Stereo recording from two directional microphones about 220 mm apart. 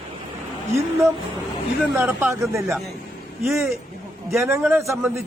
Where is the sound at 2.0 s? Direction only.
10° right (ahead or behind).